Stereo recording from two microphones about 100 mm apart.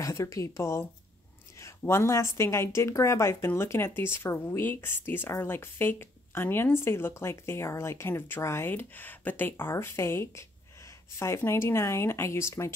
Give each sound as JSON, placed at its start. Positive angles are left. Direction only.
{"t": 0.0, "sound": "a woman's voice", "side_deg": 30}